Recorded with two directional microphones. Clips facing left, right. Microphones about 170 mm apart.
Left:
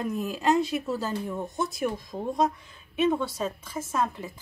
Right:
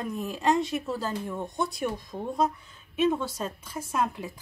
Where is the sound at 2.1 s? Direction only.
15° left (ahead or behind).